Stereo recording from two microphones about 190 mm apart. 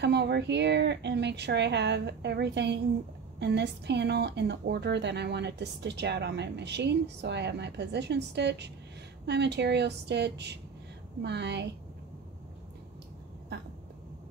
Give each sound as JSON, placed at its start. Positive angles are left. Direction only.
{"t": 0.0, "sound": "speech", "side_deg": -65}